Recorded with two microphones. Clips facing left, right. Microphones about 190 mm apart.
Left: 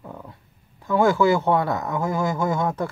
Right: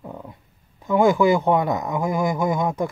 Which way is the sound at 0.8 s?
15° right (ahead or behind).